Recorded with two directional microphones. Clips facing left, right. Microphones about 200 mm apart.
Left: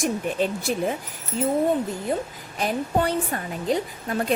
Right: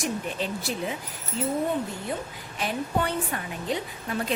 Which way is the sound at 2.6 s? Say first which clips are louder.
Left 4 dB; 40° left (ahead or behind).